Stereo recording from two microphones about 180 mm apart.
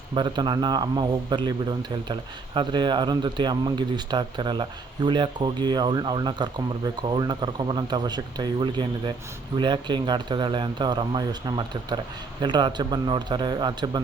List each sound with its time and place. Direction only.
0.1 s speech: 25° right (ahead or behind)